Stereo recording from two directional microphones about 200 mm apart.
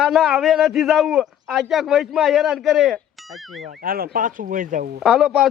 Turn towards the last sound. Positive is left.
turn(degrees=0)  # may be behind; listen again after turning